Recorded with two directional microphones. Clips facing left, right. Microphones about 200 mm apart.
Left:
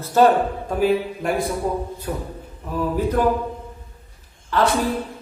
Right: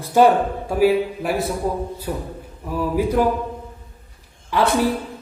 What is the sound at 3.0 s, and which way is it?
Speech, 10° right (ahead or behind).